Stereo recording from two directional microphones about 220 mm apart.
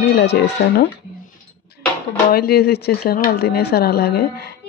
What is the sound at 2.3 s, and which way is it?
Speech, 45° left (ahead or behind).